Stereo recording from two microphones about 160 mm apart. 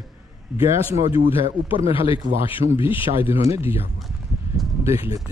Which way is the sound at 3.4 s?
15° right (ahead or behind).